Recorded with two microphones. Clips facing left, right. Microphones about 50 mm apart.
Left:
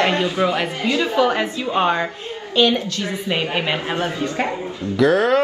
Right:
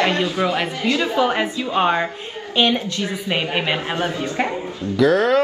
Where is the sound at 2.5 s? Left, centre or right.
Right.